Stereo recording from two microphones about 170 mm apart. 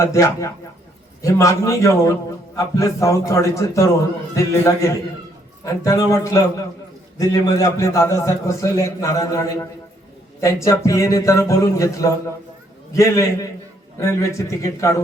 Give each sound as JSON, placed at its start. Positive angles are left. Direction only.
{"t": 0.0, "sound": "a man's voice", "side_deg": 20}